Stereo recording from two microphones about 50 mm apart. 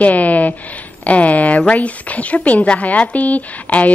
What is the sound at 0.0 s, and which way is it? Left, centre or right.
Speech, left.